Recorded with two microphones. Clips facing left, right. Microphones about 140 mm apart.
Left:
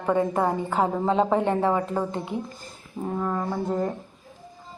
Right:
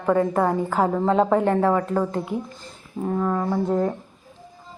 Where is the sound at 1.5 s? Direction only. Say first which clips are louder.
Right 3 dB; 20° left (ahead or behind).